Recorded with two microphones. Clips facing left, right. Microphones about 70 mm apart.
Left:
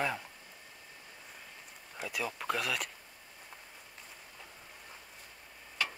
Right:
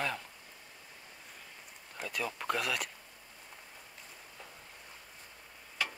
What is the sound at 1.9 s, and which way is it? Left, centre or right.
Speech, centre.